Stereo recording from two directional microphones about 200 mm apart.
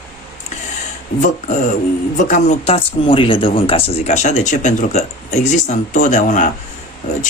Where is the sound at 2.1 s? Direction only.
40° left (ahead or behind).